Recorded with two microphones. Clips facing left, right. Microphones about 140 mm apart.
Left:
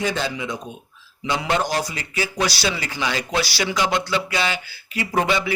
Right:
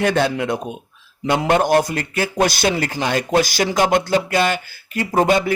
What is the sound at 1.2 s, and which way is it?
A man's voice, 50° right (ahead or behind).